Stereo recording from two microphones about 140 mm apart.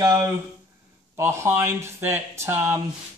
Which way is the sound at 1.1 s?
20° right (ahead or behind).